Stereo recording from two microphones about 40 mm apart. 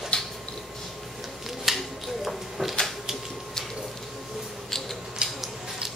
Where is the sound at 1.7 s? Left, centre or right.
Centre.